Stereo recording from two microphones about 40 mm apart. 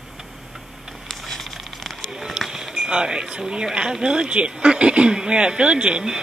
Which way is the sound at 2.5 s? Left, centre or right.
Centre.